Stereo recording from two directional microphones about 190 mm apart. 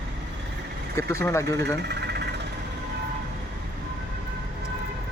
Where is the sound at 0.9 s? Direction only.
15° left (ahead or behind).